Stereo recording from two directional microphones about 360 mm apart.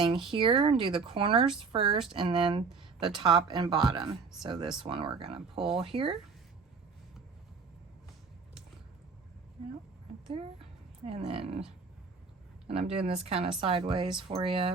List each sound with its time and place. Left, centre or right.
0.0 s speech: centre
2.6 s speech: centre
3.2 s speech: centre
11.0 s speech: centre
12.6 s speech: centre